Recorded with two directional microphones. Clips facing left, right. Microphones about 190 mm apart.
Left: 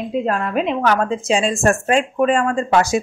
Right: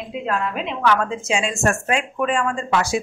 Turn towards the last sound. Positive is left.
turn(degrees=40)  # may be behind; listen again after turning